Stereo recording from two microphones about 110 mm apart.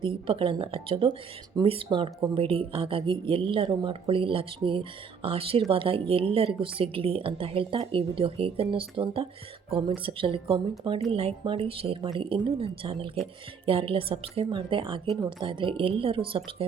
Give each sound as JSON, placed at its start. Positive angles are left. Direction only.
{"t": 0.0, "sound": "speech", "side_deg": -55}